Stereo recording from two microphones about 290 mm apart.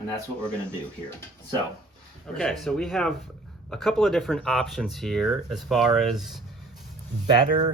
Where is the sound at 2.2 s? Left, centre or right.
Centre.